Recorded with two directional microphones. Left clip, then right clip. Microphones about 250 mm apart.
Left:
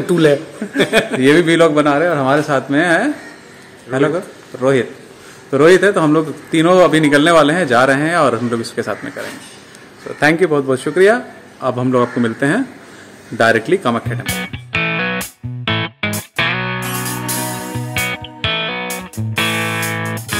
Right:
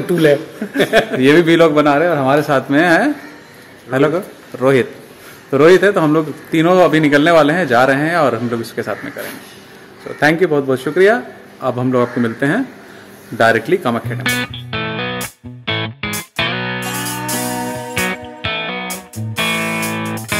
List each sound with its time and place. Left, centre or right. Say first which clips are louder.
0.1 s speech: even; centre
1.2 s a man's voice: even; centre
5.5 s a man's voice: even; centre
13.4 s music: even; centre